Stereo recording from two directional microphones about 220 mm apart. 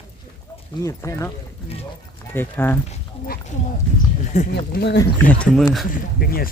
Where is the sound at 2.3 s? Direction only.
10° left (ahead or behind).